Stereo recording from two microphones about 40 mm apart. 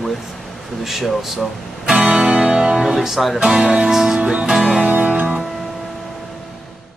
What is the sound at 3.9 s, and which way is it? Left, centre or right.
Music, centre.